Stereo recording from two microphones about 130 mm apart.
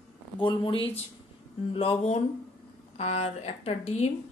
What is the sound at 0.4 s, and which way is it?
A woman's voice, 40° left (ahead or behind).